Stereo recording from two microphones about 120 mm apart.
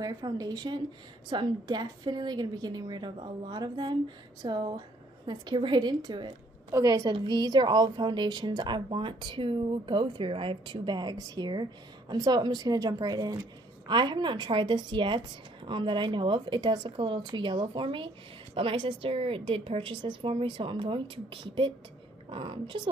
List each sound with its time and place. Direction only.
0.0 s a woman's voice: 30° right (ahead or behind)
6.7 s a woman's voice: 30° right (ahead or behind); by 22.8 s 45° right (ahead or behind)